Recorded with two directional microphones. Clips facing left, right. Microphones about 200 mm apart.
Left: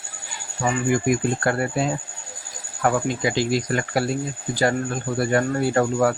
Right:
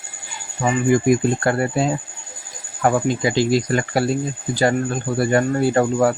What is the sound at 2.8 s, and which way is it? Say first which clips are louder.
Speech: right 3 dB; 25° right (ahead or behind).